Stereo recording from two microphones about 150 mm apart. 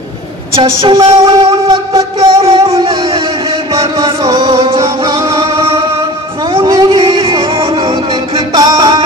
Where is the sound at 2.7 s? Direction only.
40° right (ahead or behind).